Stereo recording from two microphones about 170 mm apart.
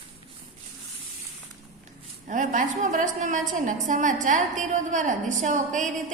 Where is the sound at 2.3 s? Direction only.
50° right (ahead or behind).